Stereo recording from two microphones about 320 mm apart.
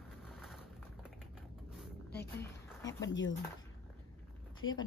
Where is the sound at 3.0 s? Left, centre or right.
Left.